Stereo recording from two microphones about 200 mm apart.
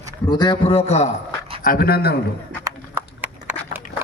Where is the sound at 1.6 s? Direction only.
45° left (ahead or behind).